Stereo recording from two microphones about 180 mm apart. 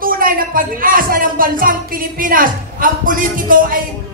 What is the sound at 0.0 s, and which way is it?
Speech, 50° right (ahead or behind).